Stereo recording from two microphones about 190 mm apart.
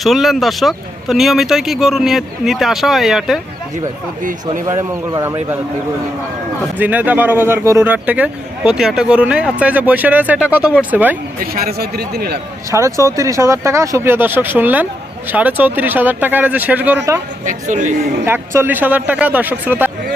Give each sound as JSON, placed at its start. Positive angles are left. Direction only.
{"t": 0.0, "sound": "speech", "side_deg": 0}
{"t": 4.6, "sound": "speech", "side_deg": -15}
{"t": 6.7, "sound": "speech", "side_deg": -10}
{"t": 11.5, "sound": "speech", "side_deg": -55}
{"t": 12.7, "sound": "speech", "side_deg": -15}
{"t": 17.4, "sound": "a woman's voice", "side_deg": -40}
{"t": 18.3, "sound": "speech", "side_deg": -10}